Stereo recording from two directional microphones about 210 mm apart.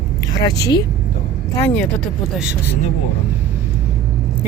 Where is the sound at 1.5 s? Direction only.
10° left (ahead or behind).